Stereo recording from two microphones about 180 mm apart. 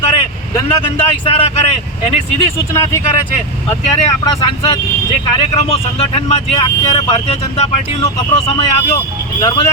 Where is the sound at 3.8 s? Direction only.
35° left (ahead or behind).